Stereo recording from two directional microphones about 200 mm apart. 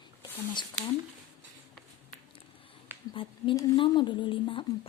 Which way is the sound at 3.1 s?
25° left (ahead or behind).